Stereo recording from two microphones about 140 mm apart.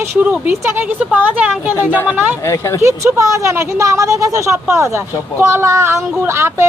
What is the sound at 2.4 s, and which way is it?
Speech, 20° left (ahead or behind).